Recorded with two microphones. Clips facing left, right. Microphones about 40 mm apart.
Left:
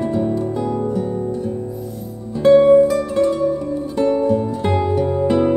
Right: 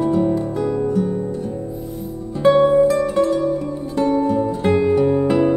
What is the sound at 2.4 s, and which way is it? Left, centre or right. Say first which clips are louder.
Music: left 3 dB; centre.